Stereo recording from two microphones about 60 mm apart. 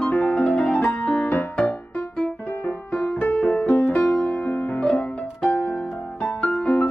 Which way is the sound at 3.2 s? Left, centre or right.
Left.